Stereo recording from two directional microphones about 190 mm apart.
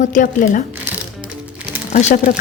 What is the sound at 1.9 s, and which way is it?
Speech, 35° left (ahead or behind).